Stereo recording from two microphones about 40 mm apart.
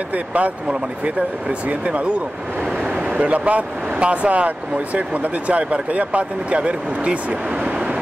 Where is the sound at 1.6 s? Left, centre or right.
Right.